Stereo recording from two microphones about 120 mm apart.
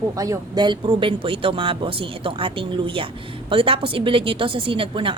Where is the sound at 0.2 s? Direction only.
30° right (ahead or behind).